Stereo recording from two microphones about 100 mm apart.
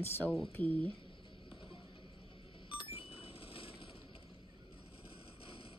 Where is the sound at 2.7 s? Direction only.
70° left (ahead or behind).